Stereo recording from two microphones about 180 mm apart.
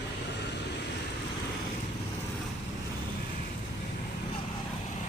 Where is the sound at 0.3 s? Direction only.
75° left (ahead or behind).